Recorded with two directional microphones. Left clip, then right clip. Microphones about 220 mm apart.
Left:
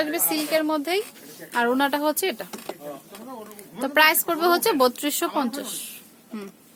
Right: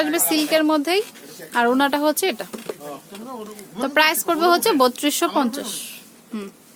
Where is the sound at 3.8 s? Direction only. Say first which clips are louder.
Right 1 dB; 5° right (ahead or behind).